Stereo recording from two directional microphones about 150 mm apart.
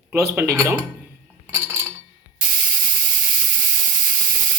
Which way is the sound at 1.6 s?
20° right (ahead or behind).